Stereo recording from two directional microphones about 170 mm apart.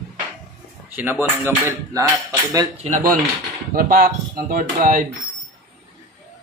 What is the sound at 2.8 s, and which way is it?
Speech, 50° right (ahead or behind).